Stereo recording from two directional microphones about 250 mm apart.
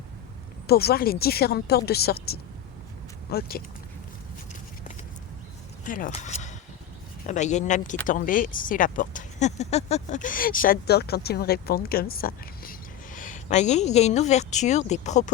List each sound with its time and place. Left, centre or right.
0.7 s speech: left
5.8 s a woman's voice: left